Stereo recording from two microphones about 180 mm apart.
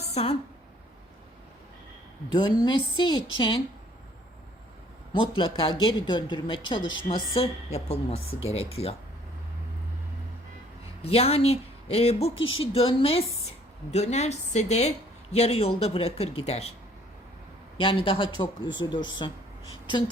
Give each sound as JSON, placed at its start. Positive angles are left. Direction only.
{"t": 0.0, "sound": "a sound", "side_deg": 35}
{"t": 2.3, "sound": "a woman's voice", "side_deg": 25}
{"t": 5.1, "sound": "a woman's voice", "side_deg": 25}
{"t": 11.0, "sound": "a woman's voice", "side_deg": 35}
{"t": 12.3, "sound": "speech", "side_deg": 90}
{"t": 12.7, "sound": "a woman's voice", "side_deg": 30}
{"t": 17.7, "sound": "a woman's voice", "side_deg": 25}
{"t": 18.7, "sound": "speech", "side_deg": 90}